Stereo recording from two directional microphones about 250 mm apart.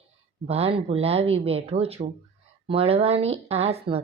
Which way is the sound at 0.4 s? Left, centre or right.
Right.